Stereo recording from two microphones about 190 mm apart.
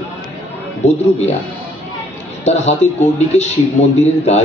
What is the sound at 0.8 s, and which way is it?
Speech, 35° left (ahead or behind).